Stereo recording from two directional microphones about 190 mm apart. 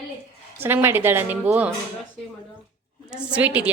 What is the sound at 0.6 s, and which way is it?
A woman's voice, 10° right (ahead or behind).